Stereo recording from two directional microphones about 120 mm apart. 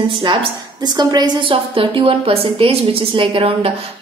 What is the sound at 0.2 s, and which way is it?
A woman's voice, 45° right (ahead or behind).